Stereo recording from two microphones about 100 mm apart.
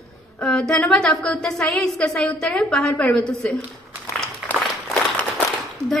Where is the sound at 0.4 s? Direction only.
10° left (ahead or behind).